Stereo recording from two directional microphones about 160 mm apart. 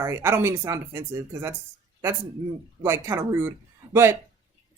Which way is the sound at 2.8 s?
15° right (ahead or behind).